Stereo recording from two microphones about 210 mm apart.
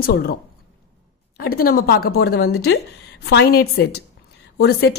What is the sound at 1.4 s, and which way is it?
Speech, 45° left (ahead or behind).